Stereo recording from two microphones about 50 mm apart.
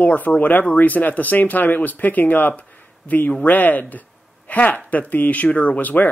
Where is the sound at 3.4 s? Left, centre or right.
Left.